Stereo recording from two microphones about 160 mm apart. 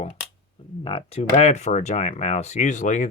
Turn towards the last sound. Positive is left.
turn(degrees=50)  # may be behind; listen again after turning